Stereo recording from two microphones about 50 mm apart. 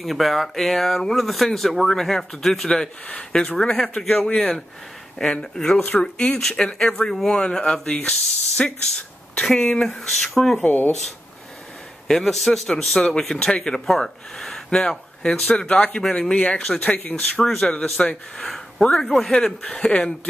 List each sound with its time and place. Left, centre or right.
0.0 s speech: centre
5.2 s speech: centre
6.4 s speech: centre
10.6 s speech: left
12.1 s speech: centre
13.0 s speech: centre; by 17.2 s left
17.2 s speech: centre
19.4 s speech: left